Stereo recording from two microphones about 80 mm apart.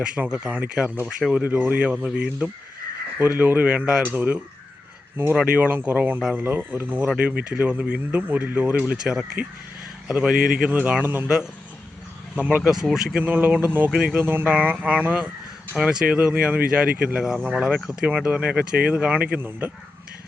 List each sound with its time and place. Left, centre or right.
0.0 s speech: centre
3.2 s speech: right
6.3 s speech: right
9.0 s speech: centre
10.7 s speech: right
12.6 s speech: centre
13.2 s speech: right
13.9 s speech: centre
14.2 s speech: right